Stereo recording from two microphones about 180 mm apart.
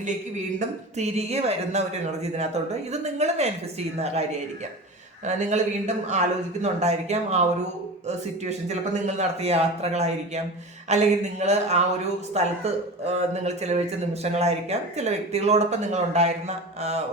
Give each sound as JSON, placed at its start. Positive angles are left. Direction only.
{"t": 0.9, "sound": "speech", "side_deg": -35}
{"t": 5.2, "sound": "speech", "side_deg": -40}